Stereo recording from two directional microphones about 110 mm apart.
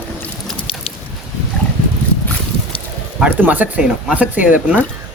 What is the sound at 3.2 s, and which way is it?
Speech, 15° right (ahead or behind).